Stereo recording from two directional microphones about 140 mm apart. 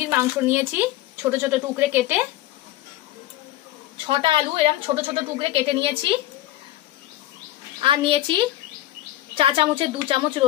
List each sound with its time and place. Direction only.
0.0 s speech: 15° right (ahead or behind)
4.1 s a woman's voice: 40° right (ahead or behind)
7.8 s a woman's voice: 40° right (ahead or behind)